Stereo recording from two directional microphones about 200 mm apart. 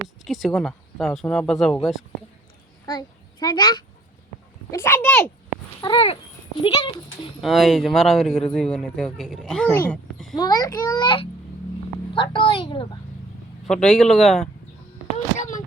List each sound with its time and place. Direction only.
0.3 s speech: centre (ahead or behind)
2.9 s a child's voice: 20° left (ahead or behind)
5.8 s a child's voice: 25° left (ahead or behind)
7.4 s speech: centre (ahead or behind)
10.3 s a child's voice: 20° left (ahead or behind)
13.7 s speech: 5° left (ahead or behind)
15.1 s a sound: 40° left (ahead or behind)